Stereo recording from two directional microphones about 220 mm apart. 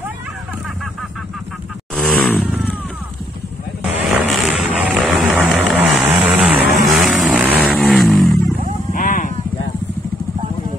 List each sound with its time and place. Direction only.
2.0 s vehicle: 5° left (ahead or behind)
3.8 s vehicle: 5° right (ahead or behind)
8.9 s a sound: 35° left (ahead or behind)